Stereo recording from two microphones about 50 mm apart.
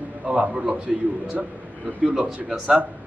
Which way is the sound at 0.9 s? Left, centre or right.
Centre.